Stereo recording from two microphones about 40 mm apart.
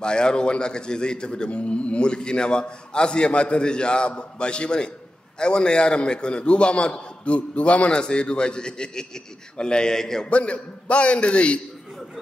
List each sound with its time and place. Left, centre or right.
0.0 s a man's voice: left
10.3 s a man's voice: left